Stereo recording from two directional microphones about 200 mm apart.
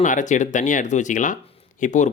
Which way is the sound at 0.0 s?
40° left (ahead or behind).